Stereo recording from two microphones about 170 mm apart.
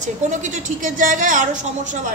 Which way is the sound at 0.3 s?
45° right (ahead or behind).